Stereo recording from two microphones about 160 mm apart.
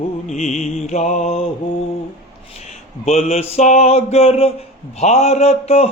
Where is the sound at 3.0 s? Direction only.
40° left (ahead or behind).